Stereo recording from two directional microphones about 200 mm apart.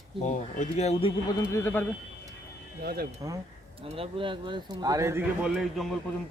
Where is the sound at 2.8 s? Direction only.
50° right (ahead or behind).